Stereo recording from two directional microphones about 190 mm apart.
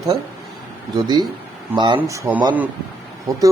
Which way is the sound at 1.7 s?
25° right (ahead or behind).